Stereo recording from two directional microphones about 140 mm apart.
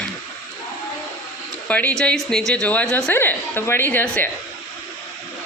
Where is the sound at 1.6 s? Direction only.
10° left (ahead or behind).